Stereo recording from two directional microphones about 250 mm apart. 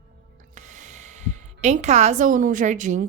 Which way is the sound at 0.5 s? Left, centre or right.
Right.